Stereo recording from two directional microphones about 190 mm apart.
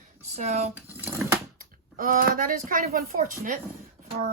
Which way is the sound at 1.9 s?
50° right (ahead or behind).